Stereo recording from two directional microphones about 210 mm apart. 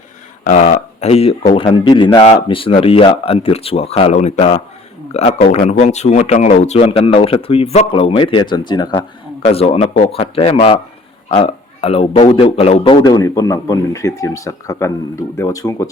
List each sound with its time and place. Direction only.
0.4 s a man's voice: 35° left (ahead or behind); by 15.9 s 15° left (ahead or behind)